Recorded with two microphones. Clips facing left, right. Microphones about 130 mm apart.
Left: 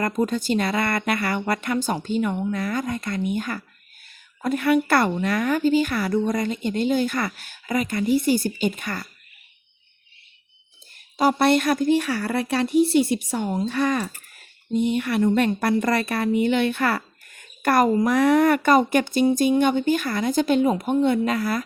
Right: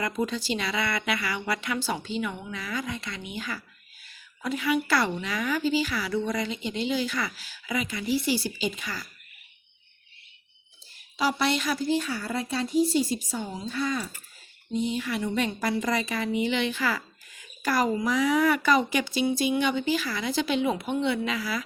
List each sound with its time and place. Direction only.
0.0 s a woman's voice: 50° left (ahead or behind)
11.2 s speech: 50° left (ahead or behind); by 14.4 s 70° left (ahead or behind)
14.7 s a woman's voice: 60° left (ahead or behind)